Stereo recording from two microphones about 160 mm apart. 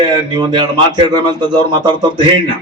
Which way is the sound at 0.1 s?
25° right (ahead or behind).